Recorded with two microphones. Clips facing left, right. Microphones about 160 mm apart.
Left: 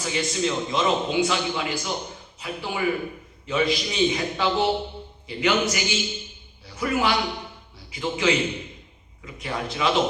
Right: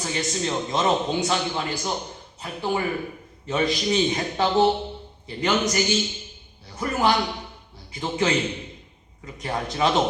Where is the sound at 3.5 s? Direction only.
40° right (ahead or behind).